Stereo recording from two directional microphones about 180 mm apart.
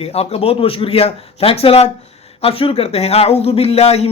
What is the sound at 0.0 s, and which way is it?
Speech, 35° left (ahead or behind).